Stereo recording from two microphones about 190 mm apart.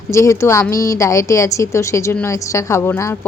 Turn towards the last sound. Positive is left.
turn(degrees=15)  # may be behind; listen again after turning